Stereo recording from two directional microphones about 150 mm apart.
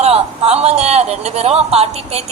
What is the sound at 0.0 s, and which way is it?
A man's voice, 45° right (ahead or behind).